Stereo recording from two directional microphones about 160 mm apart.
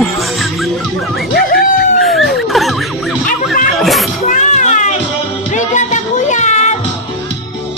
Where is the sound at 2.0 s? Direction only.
Centre (ahead or behind).